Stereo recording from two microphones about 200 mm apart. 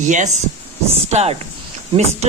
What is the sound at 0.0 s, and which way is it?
Speech, 40° right (ahead or behind).